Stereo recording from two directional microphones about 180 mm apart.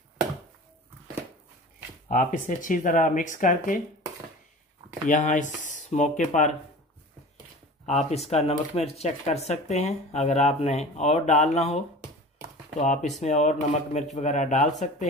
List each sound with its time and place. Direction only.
2.0 s speech: 45° left (ahead or behind)
5.0 s speech: 45° left (ahead or behind)
7.8 s speech: 35° left (ahead or behind)